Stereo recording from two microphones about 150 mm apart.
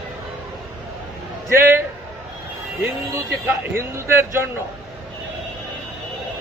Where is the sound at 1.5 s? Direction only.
15° right (ahead or behind).